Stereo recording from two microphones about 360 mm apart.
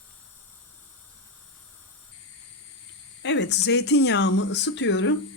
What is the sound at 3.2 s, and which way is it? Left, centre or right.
Speech, left.